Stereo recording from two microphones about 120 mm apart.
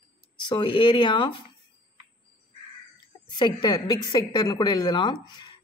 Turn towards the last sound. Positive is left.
turn(degrees=40)  # may be behind; listen again after turning